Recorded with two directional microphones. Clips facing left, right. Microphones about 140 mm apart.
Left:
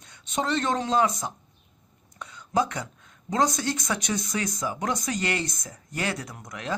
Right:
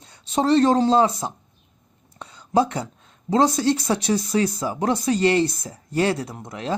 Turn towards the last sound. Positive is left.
turn(degrees=-30)  # may be behind; listen again after turning